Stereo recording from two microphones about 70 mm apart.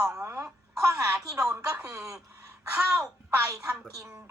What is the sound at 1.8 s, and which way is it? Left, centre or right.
Speech, right.